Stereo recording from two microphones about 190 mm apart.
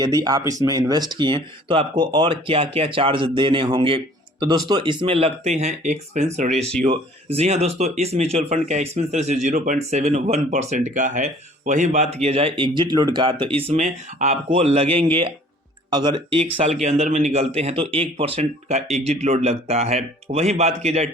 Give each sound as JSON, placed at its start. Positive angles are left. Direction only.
{"t": 0.0, "sound": "a man's voice", "side_deg": -20}